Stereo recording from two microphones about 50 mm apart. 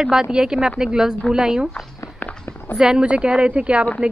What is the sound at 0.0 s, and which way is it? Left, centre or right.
Speech, centre.